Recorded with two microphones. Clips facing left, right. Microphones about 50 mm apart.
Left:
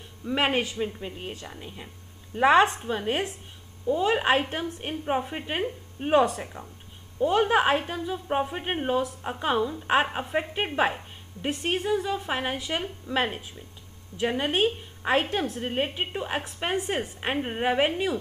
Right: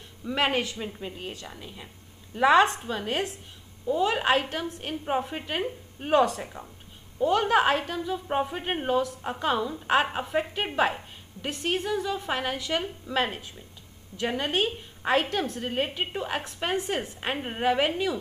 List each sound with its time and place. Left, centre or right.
0.2 s a woman's voice: centre
0.7 s a woman's voice: centre
1.2 s a woman's voice: left
5.0 s a woman's voice: centre
7.2 s a woman's voice: centre
10.8 s a woman's voice: left